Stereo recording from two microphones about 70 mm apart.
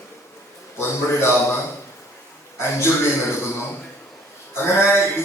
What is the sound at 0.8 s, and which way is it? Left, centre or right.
Speech, left.